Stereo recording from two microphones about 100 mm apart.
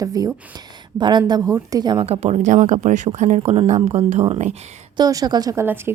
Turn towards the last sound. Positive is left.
turn(degrees=-20)  # may be behind; listen again after turning